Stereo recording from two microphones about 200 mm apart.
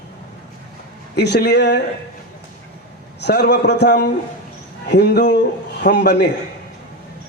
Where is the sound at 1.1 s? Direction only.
55° left (ahead or behind).